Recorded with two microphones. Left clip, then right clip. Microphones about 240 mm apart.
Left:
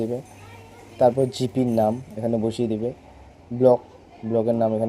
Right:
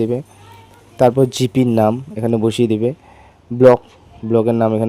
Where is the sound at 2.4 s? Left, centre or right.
Right.